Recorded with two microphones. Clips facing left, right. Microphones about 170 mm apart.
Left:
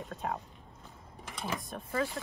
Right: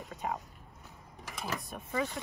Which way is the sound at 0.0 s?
10° right (ahead or behind).